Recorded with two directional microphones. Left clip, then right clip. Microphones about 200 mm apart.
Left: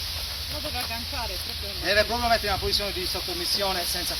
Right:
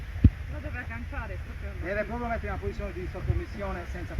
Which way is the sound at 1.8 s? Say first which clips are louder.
Left 9 dB; 15° right (ahead or behind).